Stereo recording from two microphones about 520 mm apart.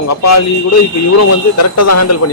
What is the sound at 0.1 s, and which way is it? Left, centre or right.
A man's voice, left.